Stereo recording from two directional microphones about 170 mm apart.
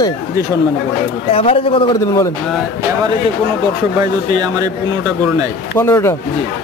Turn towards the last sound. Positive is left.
turn(degrees=15)  # may be behind; listen again after turning